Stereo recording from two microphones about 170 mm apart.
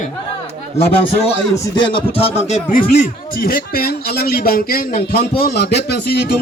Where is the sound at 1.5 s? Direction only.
30° left (ahead or behind).